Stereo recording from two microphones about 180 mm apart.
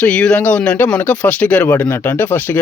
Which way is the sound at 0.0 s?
5° left (ahead or behind).